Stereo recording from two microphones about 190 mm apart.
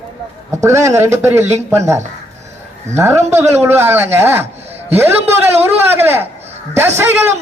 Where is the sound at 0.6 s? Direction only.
15° right (ahead or behind).